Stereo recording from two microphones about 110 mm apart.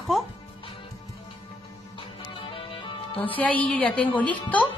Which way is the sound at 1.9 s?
55° left (ahead or behind).